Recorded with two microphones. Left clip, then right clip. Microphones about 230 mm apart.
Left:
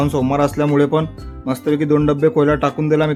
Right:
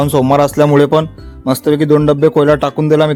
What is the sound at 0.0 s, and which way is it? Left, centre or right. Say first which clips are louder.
Speech: right 6 dB; right.